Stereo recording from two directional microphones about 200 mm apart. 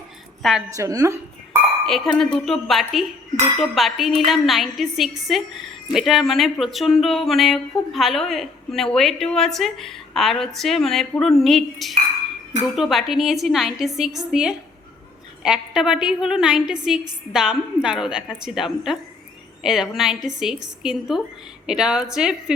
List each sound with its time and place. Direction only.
0.4 s a woman's voice: centre (ahead or behind)
0.8 s a woman's voice: 15° right (ahead or behind)
1.9 s a woman's voice: centre (ahead or behind)